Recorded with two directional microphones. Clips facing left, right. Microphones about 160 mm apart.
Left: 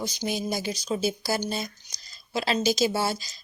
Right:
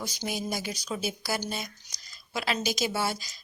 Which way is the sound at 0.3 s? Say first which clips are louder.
Left 3 dB; 25° left (ahead or behind).